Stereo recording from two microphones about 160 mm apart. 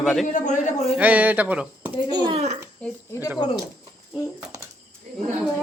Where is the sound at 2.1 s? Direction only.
25° right (ahead or behind).